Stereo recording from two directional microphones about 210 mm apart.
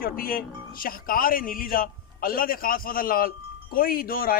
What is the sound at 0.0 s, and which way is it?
Speech, 45° left (ahead or behind).